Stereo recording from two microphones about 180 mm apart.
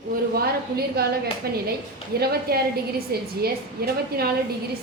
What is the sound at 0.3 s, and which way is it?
A woman's voice, 60° right (ahead or behind).